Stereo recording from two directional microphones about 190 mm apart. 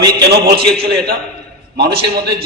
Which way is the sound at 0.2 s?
60° right (ahead or behind).